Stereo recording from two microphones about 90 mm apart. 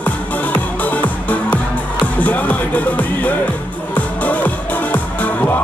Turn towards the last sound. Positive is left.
turn(degrees=20)  # may be behind; listen again after turning